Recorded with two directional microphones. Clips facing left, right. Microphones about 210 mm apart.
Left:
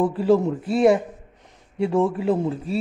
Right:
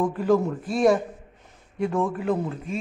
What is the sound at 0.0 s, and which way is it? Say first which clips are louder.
Speech: left 3 dB; 30° left (ahead or behind).